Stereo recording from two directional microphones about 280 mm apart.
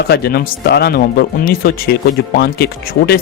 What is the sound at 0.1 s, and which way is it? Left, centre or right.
Speech, left.